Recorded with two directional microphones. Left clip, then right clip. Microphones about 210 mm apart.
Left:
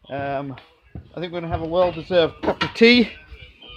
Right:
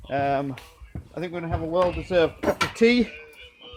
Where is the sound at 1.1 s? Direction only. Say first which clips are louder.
Left 3 dB; 30° left (ahead or behind).